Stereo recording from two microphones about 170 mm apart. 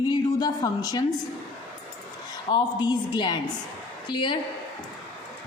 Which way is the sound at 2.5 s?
25° left (ahead or behind).